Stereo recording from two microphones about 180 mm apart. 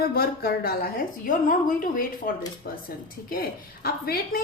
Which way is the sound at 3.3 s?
55° left (ahead or behind).